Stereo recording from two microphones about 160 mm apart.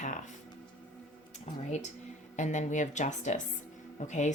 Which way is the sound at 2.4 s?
50° left (ahead or behind).